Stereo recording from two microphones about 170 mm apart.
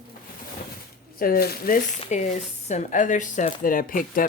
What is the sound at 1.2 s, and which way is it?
Speech, 60° left (ahead or behind).